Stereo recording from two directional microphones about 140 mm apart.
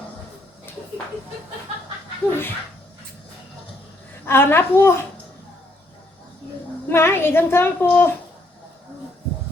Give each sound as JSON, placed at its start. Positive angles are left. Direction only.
{"t": 2.3, "sound": "a woman's voice", "side_deg": 15}
{"t": 4.3, "sound": "a woman's voice", "side_deg": 15}
{"t": 6.8, "sound": "a woman's voice", "side_deg": 15}